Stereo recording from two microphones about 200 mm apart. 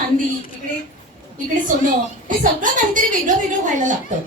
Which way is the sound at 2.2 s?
40° right (ahead or behind).